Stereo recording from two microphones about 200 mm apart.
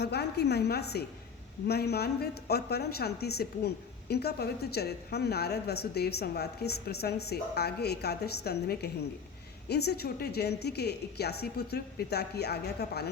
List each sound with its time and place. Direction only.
0.0 s a woman's voice: 55° left (ahead or behind)